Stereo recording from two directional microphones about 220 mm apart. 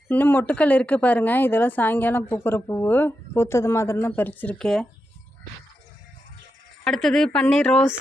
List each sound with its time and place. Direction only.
0.1 s speech: 10° left (ahead or behind)
6.8 s speech: centre (ahead or behind)